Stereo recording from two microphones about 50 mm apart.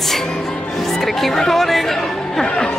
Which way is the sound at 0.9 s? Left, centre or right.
Centre.